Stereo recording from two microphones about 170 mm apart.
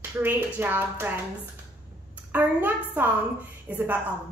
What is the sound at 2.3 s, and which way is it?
A woman's voice, 10° right (ahead or behind).